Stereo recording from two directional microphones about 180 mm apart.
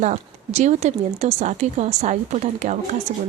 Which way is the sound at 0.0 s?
40° right (ahead or behind).